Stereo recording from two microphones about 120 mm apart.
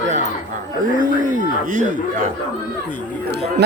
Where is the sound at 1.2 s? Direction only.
90° right.